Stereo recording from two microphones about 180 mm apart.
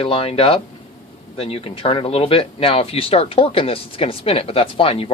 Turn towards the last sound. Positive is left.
turn(degrees=30)  # may be behind; listen again after turning